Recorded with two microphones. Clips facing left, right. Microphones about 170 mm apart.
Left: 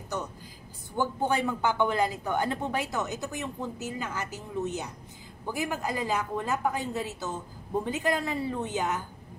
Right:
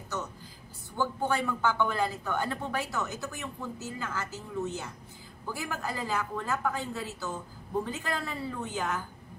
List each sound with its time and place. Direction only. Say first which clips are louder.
0.9 s a woman's voice: left 2 dB; 20° left (ahead or behind)